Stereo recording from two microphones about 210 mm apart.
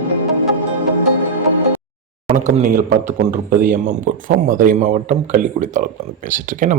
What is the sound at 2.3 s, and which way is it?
A man's voice, 35° right (ahead or behind).